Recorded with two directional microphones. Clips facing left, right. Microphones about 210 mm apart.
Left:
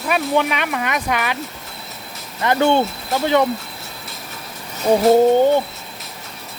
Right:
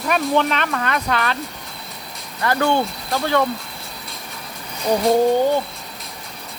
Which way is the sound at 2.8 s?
5° left (ahead or behind).